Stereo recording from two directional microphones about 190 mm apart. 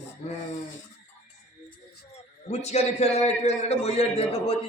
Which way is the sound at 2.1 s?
35° left (ahead or behind).